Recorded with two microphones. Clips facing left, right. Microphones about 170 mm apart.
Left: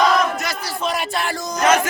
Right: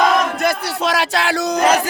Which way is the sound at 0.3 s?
60° right (ahead or behind).